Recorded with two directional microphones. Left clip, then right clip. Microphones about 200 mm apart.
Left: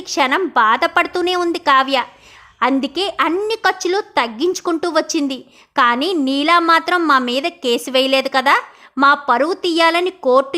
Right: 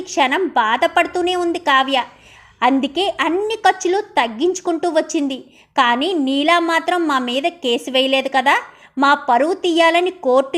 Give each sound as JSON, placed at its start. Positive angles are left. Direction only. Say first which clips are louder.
{"t": 0.0, "sound": "a woman's voice", "louder": "even", "side_deg": 15}